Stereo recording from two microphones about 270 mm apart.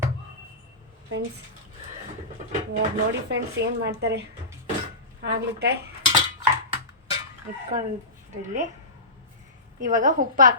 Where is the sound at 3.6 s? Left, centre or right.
Right.